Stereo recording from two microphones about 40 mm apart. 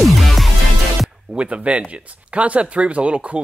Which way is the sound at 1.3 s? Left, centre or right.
Right.